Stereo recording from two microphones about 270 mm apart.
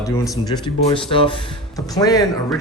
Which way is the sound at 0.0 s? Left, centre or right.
Centre.